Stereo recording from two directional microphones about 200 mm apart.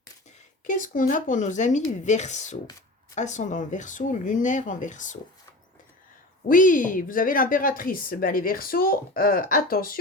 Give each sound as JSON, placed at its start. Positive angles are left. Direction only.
{"t": 0.7, "sound": "speech", "side_deg": 40}
{"t": 6.5, "sound": "speech", "side_deg": 40}